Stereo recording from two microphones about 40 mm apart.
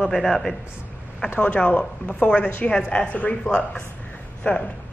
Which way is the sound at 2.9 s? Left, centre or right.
Left.